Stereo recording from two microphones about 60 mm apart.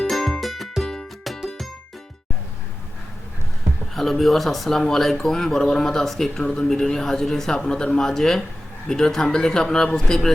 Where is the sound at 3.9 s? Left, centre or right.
Centre.